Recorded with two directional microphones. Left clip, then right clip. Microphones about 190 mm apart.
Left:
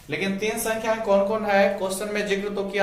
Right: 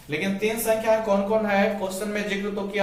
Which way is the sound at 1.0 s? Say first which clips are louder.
Left 1 dB; 25° left (ahead or behind).